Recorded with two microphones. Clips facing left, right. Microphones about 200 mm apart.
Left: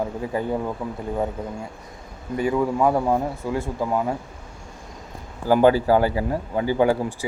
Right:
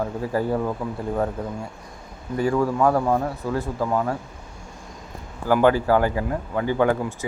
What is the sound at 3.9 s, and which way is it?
Speech, 15° left (ahead or behind).